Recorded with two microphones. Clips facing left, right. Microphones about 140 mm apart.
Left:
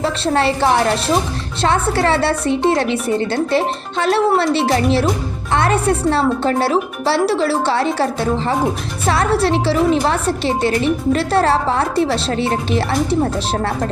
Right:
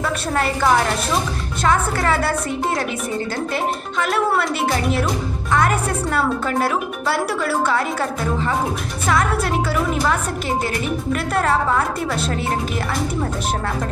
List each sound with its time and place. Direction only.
0.0 s a woman's voice: 30° left (ahead or behind)